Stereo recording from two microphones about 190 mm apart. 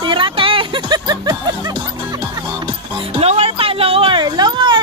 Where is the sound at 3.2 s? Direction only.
30° right (ahead or behind).